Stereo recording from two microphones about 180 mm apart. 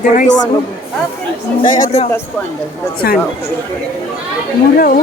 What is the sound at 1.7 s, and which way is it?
Speech, 45° left (ahead or behind).